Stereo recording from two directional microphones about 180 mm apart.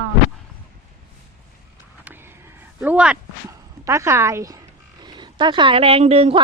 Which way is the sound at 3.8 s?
15° right (ahead or behind).